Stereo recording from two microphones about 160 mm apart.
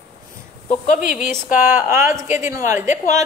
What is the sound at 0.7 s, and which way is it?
Speech, 55° left (ahead or behind).